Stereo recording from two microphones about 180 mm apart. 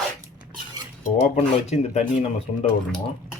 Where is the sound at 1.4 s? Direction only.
40° left (ahead or behind).